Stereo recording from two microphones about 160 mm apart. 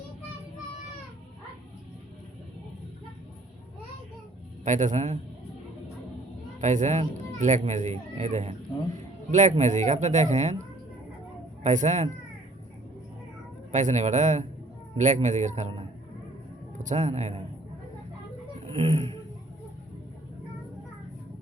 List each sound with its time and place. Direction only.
4.6 s speech: 50° right (ahead or behind)
6.6 s speech: 50° right (ahead or behind)
11.6 s speech: 50° right (ahead or behind)
13.7 s speech: 50° right (ahead or behind)
16.7 s a man's voice: 50° right (ahead or behind)
18.7 s a sound: 40° right (ahead or behind)